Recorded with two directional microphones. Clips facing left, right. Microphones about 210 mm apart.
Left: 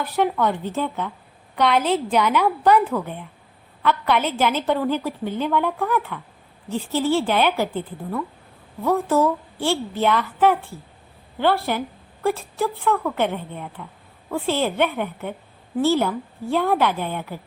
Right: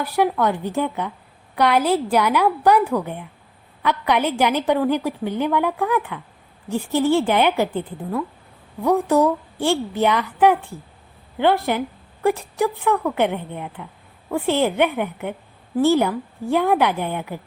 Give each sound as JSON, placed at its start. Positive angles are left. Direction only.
{"t": 0.0, "sound": "a woman's voice", "side_deg": -10}